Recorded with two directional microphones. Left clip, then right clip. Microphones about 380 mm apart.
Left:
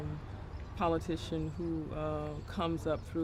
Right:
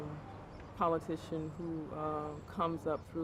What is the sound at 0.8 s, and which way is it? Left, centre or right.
Speech, centre.